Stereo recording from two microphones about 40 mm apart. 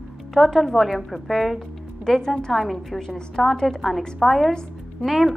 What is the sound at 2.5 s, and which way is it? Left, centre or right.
Speech, centre.